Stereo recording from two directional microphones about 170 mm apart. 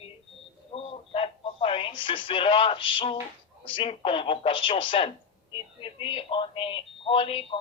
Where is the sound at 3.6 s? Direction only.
30° left (ahead or behind).